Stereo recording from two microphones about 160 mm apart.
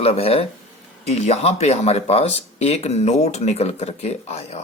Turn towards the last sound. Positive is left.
turn(degrees=40)  # may be behind; listen again after turning